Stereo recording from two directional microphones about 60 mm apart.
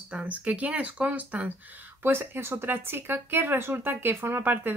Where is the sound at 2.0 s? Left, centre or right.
Right.